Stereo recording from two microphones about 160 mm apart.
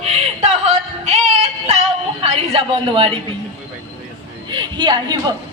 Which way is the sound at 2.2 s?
40° right (ahead or behind).